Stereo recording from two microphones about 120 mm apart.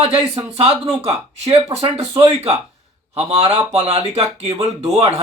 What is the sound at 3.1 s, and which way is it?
Speech, 60° right (ahead or behind).